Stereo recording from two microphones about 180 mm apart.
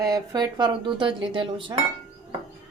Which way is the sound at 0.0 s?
20° right (ahead or behind).